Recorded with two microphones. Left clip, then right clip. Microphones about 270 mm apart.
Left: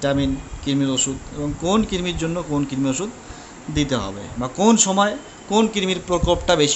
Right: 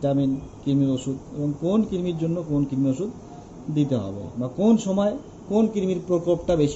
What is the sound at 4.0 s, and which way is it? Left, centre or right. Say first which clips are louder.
Speech: left 4 dB; left.